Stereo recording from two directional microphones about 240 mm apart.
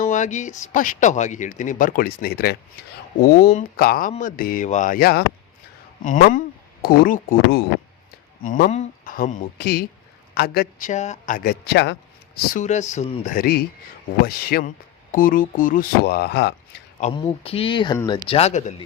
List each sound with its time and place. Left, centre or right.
0.0 s speech: left
12.5 s speech: left
17.0 s speech: left
18.3 s speech: left